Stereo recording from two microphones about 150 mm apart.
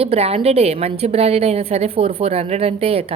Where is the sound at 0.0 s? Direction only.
40° right (ahead or behind).